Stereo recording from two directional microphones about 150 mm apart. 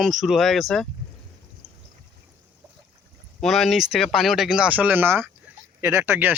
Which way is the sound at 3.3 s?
Centre (ahead or behind).